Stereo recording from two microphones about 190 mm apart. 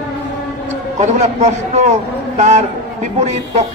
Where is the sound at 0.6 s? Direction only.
35° right (ahead or behind).